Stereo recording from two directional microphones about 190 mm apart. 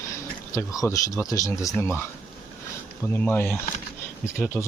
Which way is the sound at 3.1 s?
10° left (ahead or behind).